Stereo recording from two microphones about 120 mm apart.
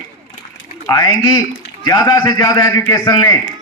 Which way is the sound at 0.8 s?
35° left (ahead or behind).